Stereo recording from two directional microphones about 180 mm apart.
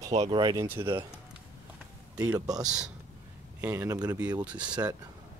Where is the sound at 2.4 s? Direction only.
20° right (ahead or behind).